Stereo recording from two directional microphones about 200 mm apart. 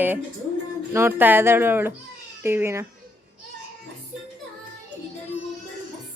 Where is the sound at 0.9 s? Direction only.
10° right (ahead or behind).